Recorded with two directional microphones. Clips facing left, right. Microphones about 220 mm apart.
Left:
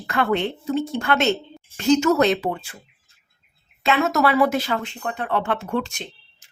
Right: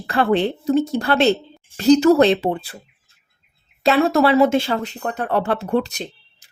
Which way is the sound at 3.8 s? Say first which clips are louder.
Right 4 dB; 35° right (ahead or behind).